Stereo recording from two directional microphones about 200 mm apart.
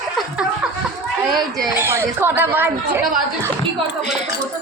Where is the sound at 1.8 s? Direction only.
10° right (ahead or behind).